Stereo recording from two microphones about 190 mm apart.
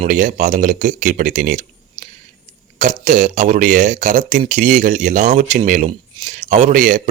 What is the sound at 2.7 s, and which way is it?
Speech, 40° right (ahead or behind).